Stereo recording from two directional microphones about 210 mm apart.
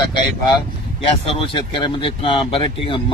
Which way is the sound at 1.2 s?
25° left (ahead or behind).